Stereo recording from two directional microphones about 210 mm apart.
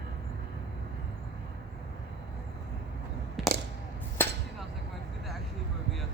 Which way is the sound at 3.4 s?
Centre (ahead or behind).